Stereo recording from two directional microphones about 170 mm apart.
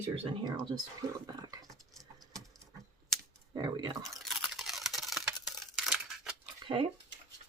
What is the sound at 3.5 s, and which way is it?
Speech, 25° right (ahead or behind).